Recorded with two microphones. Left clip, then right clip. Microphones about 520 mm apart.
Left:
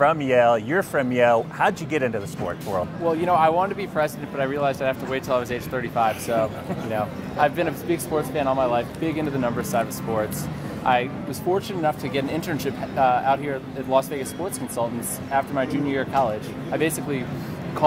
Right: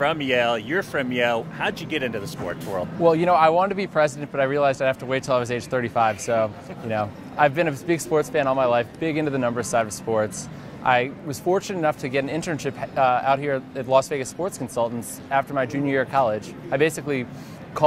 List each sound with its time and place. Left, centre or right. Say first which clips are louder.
0.0 s speech: left 3 dB; left
3.1 s speech: right 2 dB; right